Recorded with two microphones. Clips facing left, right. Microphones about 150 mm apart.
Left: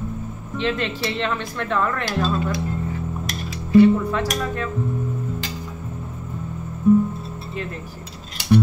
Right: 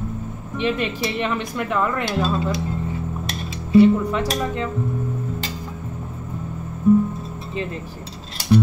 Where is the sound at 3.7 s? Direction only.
20° right (ahead or behind).